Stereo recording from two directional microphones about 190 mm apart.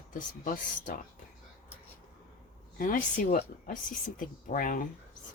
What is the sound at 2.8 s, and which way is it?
Speech, 45° left (ahead or behind).